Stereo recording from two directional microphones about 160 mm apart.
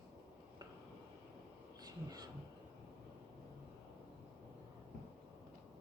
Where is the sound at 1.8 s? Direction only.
25° right (ahead or behind).